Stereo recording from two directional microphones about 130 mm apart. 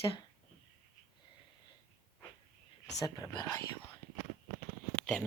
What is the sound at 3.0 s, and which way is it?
Speech, 30° left (ahead or behind).